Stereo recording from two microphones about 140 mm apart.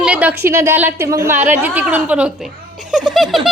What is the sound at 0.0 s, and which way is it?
A woman's voice, 10° right (ahead or behind).